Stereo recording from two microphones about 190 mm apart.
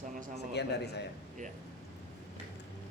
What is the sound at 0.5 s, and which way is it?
Speech, 60° left (ahead or behind).